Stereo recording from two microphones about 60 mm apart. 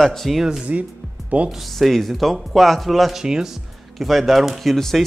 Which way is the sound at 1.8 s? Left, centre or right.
Centre.